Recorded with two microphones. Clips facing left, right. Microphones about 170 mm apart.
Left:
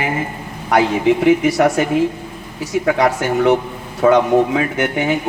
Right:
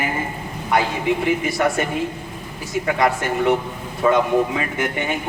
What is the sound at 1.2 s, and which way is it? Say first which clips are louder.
A man's voice: left 8 dB; 75° left (ahead or behind).